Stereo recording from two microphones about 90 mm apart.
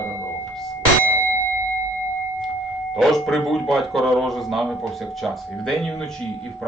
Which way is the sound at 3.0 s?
Centre (ahead or behind).